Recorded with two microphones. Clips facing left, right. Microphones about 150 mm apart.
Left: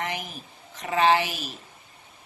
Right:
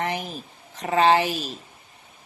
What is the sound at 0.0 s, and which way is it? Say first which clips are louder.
Speech: right 4 dB; 40° right (ahead or behind).